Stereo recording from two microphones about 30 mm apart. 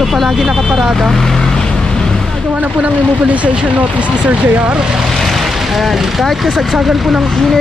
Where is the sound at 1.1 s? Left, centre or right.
Centre.